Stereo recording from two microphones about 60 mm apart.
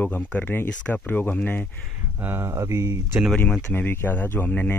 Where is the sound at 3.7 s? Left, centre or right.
Left.